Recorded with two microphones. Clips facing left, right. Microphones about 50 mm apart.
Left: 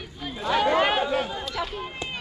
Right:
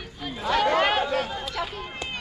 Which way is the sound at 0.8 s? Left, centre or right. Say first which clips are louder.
Even; right.